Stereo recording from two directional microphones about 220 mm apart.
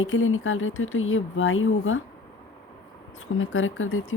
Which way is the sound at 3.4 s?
65° left (ahead or behind).